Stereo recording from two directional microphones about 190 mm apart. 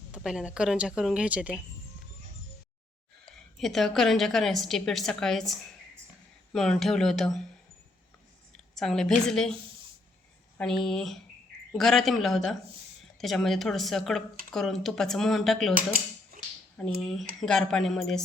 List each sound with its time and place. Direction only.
0.1 s a woman's voice: 5° right (ahead or behind)
3.6 s a woman's voice: centre (ahead or behind)
8.5 s a woman's voice: centre (ahead or behind)
10.6 s a woman's voice: centre (ahead or behind)
15.7 s speech: 50° right (ahead or behind)
16.7 s a woman's voice: centre (ahead or behind)